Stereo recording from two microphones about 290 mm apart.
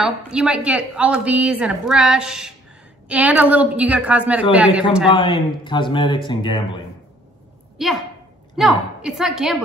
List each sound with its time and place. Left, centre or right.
0.0 s a woman's voice: centre
5.1 s speech: centre
7.7 s a sound: centre
8.5 s a woman's voice: centre